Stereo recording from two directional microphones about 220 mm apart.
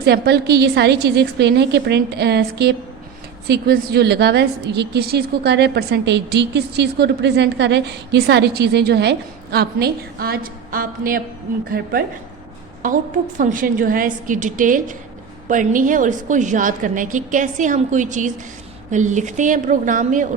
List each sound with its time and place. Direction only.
0.0 s a woman's voice: 50° right (ahead or behind)